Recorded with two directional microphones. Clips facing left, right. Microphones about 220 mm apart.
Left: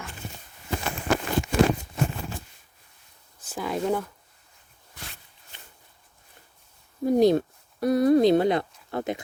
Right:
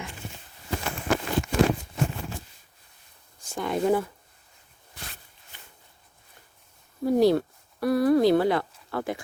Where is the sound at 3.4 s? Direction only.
5° left (ahead or behind).